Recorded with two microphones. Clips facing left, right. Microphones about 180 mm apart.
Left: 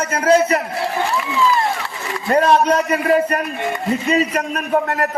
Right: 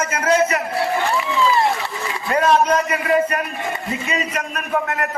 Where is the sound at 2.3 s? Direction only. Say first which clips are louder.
Left 2 dB; 35° left (ahead or behind).